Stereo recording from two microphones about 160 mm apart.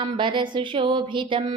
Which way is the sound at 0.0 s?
30° right (ahead or behind).